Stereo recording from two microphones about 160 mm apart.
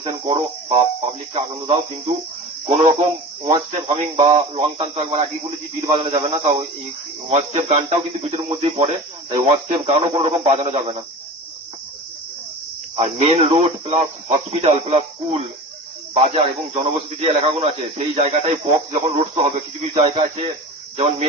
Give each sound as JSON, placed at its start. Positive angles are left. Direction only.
{"t": 0.0, "sound": "speech", "side_deg": -30}
{"t": 13.0, "sound": "a man's voice", "side_deg": -40}
{"t": 20.1, "sound": "speech", "side_deg": -35}